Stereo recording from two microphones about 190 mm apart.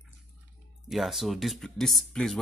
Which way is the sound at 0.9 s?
Centre (ahead or behind).